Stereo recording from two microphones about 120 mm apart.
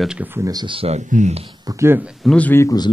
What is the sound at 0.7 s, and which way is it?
Speech, 60° right (ahead or behind).